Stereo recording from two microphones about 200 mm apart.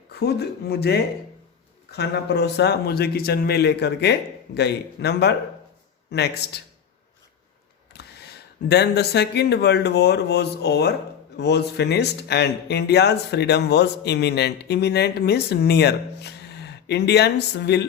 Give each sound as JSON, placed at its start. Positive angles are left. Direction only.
{"t": 0.1, "sound": "speech", "side_deg": 55}
{"t": 7.9, "sound": "a sound", "side_deg": 55}
{"t": 8.6, "sound": "speech", "side_deg": 55}